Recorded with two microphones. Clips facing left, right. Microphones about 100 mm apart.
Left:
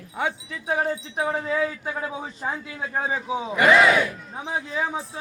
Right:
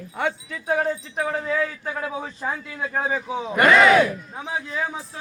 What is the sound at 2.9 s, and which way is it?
Speech, 10° left (ahead or behind).